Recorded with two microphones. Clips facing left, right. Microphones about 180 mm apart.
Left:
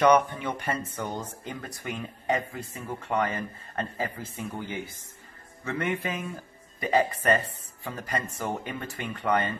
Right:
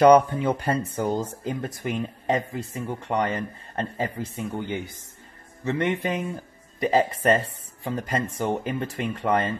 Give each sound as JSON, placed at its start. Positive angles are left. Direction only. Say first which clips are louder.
{"t": 0.0, "sound": "speech", "louder": "right 6 dB", "side_deg": -30}